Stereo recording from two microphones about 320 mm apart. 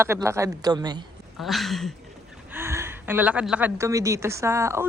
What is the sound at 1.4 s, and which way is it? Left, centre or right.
A woman's voice, centre.